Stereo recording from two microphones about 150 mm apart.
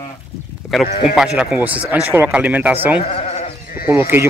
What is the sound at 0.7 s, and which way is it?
A man's voice, centre (ahead or behind).